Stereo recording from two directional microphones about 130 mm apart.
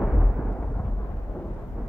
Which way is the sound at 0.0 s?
5° left (ahead or behind).